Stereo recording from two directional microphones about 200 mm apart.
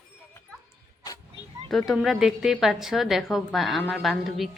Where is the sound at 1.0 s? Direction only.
20° left (ahead or behind).